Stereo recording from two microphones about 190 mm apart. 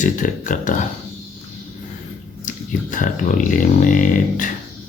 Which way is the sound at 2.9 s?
45° left (ahead or behind).